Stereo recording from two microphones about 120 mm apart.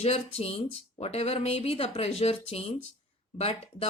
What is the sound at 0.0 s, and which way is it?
Speech, 60° left (ahead or behind).